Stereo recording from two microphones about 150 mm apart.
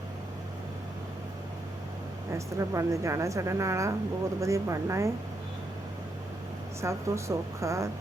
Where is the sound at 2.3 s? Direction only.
20° right (ahead or behind).